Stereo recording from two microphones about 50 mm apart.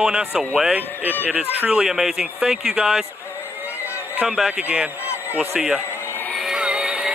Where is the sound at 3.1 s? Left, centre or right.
Left.